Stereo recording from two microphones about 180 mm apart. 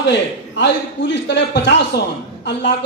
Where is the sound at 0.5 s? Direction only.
80° left.